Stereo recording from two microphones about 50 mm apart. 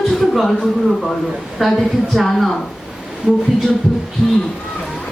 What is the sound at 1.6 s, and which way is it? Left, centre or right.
Speech, centre.